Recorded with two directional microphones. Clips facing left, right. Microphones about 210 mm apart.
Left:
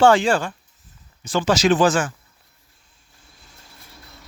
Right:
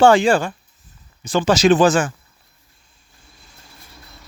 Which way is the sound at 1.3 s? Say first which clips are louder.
Right 3 dB; 20° right (ahead or behind).